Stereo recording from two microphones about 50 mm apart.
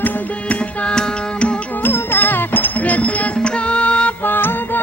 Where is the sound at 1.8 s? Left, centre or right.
Left.